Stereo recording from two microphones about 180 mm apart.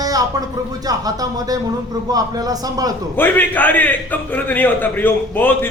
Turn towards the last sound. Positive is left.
turn(degrees=10)  # may be behind; listen again after turning